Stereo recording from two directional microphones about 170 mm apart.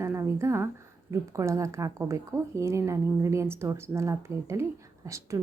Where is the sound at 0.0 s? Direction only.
15° right (ahead or behind).